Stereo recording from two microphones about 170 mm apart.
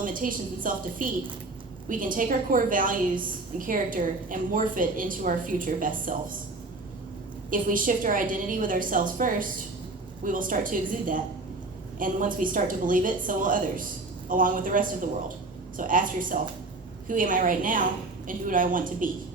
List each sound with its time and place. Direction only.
0.0 s a woman's voice: 55° right (ahead or behind)
7.5 s a woman's voice: 50° right (ahead or behind)